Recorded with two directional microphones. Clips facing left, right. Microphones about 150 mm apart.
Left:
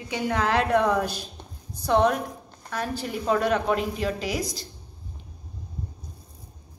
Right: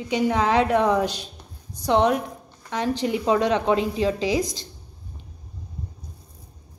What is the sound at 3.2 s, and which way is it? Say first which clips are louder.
A woman's voice: right 2 dB; 25° right (ahead or behind).